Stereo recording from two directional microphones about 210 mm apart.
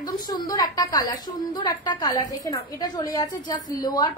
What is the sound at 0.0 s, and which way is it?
A woman's voice, 15° left (ahead or behind).